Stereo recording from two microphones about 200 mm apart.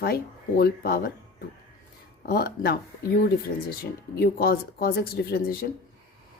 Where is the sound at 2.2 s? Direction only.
50° left (ahead or behind).